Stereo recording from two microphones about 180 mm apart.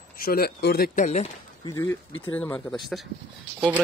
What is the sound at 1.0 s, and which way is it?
Speech, 40° left (ahead or behind).